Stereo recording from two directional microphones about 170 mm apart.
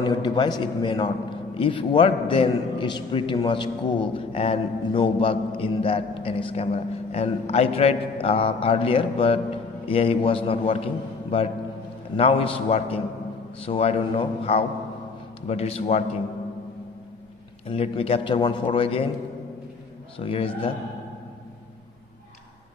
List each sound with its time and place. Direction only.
0.0 s a man's voice: 25° left (ahead or behind)
17.6 s a man's voice: 35° left (ahead or behind)
20.2 s a man's voice: 35° left (ahead or behind)